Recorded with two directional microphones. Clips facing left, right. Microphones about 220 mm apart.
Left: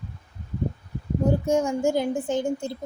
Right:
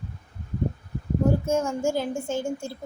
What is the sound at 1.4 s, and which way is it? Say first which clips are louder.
A woman's voice: left 2 dB; 15° left (ahead or behind).